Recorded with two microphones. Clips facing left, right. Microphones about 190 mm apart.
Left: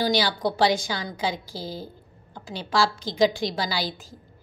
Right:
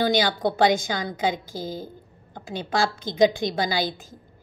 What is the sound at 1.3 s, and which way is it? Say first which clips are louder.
A woman's voice: right 2 dB; 50° right (ahead or behind).